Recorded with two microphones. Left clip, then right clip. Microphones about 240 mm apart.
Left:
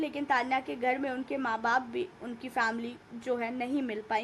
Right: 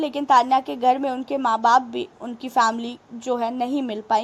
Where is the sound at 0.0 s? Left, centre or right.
Right.